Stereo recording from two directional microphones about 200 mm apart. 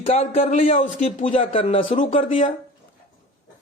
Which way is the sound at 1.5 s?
25° left (ahead or behind).